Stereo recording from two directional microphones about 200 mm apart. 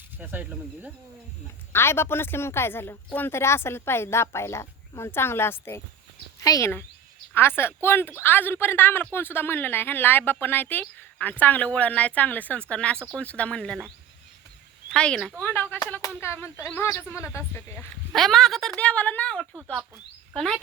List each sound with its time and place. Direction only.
0.2 s speech: 10° right (ahead or behind)
1.7 s speech: 10° left (ahead or behind)
14.8 s speech: 5° left (ahead or behind)
18.1 s speech: centre (ahead or behind)